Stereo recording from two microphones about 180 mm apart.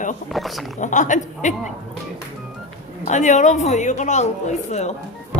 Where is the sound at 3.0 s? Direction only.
40° left (ahead or behind).